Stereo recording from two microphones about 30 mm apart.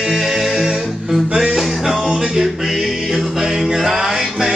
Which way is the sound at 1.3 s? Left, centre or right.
Right.